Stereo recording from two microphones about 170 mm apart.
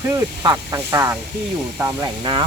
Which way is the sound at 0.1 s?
20° right (ahead or behind).